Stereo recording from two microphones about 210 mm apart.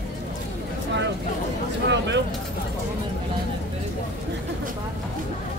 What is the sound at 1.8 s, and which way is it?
Speech, 55° right (ahead or behind).